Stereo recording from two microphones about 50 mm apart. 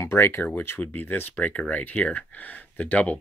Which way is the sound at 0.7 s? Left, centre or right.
Left.